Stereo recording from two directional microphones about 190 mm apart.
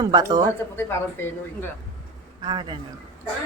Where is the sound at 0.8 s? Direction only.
10° left (ahead or behind).